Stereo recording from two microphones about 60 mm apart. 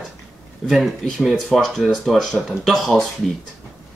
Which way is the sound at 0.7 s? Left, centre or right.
Centre.